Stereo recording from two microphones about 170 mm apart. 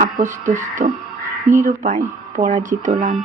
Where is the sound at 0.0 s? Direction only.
50° right (ahead or behind).